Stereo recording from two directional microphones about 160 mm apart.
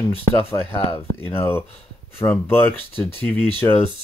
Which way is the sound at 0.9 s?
15° left (ahead or behind).